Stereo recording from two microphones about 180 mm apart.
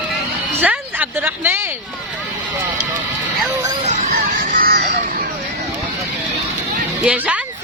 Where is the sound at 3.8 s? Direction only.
50° right (ahead or behind).